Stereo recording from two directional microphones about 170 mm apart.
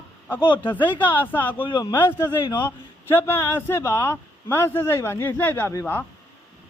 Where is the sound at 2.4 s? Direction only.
25° left (ahead or behind).